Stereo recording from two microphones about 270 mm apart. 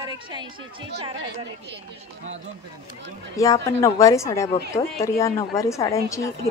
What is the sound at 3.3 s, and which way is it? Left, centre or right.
A woman's voice, centre.